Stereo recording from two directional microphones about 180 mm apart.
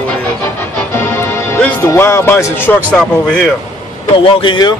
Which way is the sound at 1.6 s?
10° left (ahead or behind).